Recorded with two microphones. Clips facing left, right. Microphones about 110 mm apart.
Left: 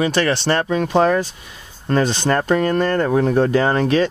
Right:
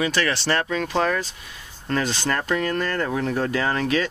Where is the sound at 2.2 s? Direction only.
35° left (ahead or behind).